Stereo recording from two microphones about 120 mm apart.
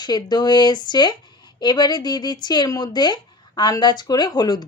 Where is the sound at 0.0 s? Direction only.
35° left (ahead or behind).